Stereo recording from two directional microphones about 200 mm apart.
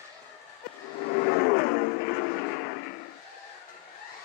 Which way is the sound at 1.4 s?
50° left (ahead or behind).